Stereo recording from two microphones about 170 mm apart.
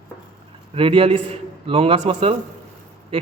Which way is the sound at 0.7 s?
30° right (ahead or behind).